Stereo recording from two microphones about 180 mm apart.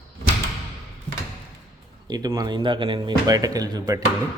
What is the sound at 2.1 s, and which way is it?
Speech, 20° right (ahead or behind).